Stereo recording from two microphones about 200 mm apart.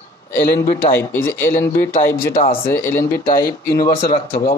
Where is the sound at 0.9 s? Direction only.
10° left (ahead or behind).